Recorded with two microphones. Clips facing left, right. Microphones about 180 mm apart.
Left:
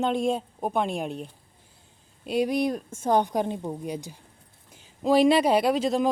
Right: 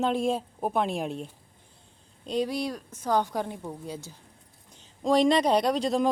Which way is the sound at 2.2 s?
10° left (ahead or behind).